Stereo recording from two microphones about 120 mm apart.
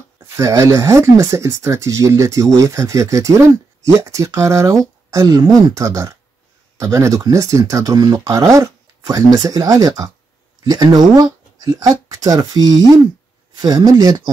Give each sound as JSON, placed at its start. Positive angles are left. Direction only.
{"t": 0.2, "sound": "speech", "side_deg": -25}